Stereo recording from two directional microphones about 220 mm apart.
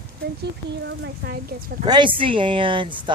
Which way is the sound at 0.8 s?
50° right (ahead or behind).